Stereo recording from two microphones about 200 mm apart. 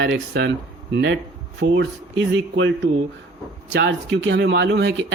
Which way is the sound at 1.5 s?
60° right (ahead or behind).